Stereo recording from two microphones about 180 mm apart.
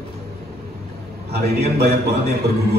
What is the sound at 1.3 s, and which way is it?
A man's voice, 65° right (ahead or behind).